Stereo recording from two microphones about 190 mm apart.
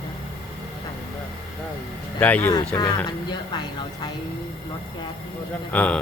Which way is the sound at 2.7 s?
20° left (ahead or behind).